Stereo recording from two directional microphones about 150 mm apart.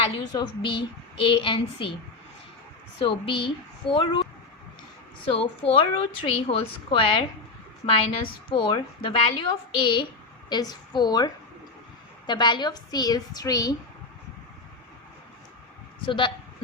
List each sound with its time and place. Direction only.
0.0 s a woman's voice: 35° left (ahead or behind)
3.0 s a woman's voice: 35° left (ahead or behind)
5.4 s a woman's voice: 40° left (ahead or behind)
16.0 s speech: 35° left (ahead or behind)